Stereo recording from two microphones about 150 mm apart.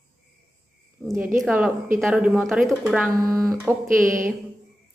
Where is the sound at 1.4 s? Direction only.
10° right (ahead or behind).